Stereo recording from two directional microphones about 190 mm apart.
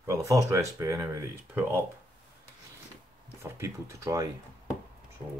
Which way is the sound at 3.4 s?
15° right (ahead or behind).